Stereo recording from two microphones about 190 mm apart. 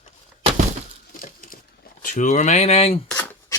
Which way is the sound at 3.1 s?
10° left (ahead or behind).